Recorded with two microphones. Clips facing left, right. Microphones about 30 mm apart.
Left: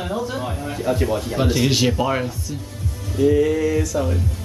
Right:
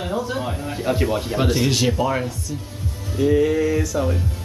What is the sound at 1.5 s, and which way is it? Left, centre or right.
Speech, centre.